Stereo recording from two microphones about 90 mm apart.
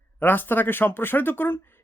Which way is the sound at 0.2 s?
20° left (ahead or behind).